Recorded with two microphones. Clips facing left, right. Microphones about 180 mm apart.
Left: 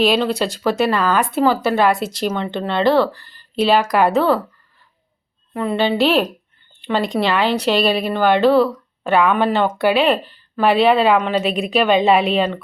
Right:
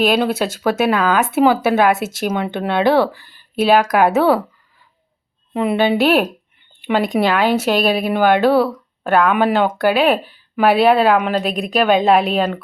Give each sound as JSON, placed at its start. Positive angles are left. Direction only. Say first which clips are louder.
{"t": 0.0, "sound": "speech", "louder": "right 1 dB", "side_deg": -5}
{"t": 5.5, "sound": "speech", "louder": "right 2 dB", "side_deg": -15}